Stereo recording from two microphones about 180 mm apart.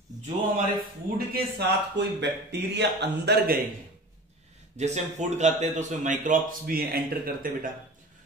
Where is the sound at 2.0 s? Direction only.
75° right (ahead or behind).